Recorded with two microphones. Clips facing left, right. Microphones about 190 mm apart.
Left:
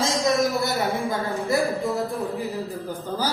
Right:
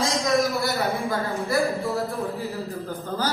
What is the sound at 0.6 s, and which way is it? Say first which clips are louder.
Speech: left 1 dB; 20° left (ahead or behind).